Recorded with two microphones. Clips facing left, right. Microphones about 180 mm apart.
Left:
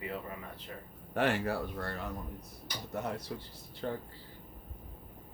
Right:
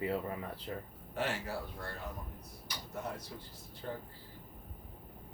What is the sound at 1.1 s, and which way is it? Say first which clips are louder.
Speech: left 6 dB; 60° left (ahead or behind).